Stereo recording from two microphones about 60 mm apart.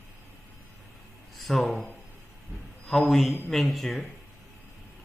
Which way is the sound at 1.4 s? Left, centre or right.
Centre.